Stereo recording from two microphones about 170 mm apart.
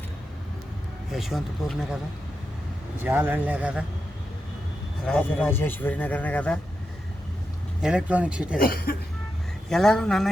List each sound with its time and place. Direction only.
1.1 s speech: centre (ahead or behind)
3.0 s speech: 10° right (ahead or behind)
5.0 s a man's voice: 5° left (ahead or behind)
7.8 s speech: 5° right (ahead or behind)
8.5 s speech: 60° left (ahead or behind)
9.6 s speech: 5° left (ahead or behind)